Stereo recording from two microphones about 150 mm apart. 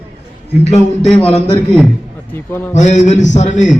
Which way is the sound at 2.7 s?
50° left (ahead or behind).